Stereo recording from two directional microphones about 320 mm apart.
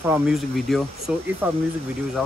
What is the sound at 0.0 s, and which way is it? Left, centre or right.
Speech, centre.